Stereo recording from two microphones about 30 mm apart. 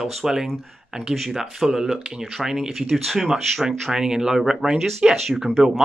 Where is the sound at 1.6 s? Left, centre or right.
Centre.